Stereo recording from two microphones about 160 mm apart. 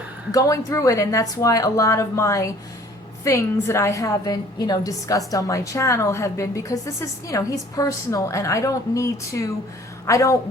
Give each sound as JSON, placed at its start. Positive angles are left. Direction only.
{"t": 0.3, "sound": "a woman's voice", "side_deg": 20}